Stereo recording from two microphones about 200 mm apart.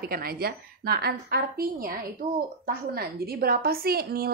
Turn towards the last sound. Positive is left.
turn(degrees=-50)  # may be behind; listen again after turning